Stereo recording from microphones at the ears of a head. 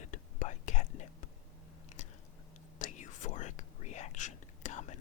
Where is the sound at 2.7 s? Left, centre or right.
Left.